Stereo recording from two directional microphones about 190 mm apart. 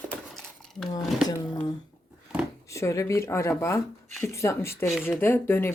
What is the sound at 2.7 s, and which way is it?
Speech, 15° left (ahead or behind).